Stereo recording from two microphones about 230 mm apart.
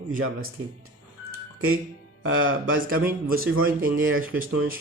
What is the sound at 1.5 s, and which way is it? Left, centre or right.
Speech, right.